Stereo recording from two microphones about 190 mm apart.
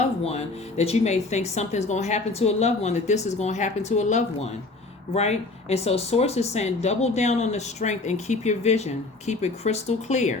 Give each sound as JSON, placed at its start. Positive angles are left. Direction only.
{"t": 0.3, "sound": "speech", "side_deg": 35}